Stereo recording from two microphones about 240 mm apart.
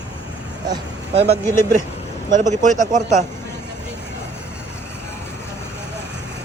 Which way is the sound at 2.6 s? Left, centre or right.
Right.